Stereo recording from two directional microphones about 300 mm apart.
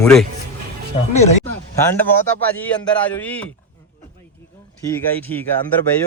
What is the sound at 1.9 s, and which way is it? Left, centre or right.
A man's voice, centre.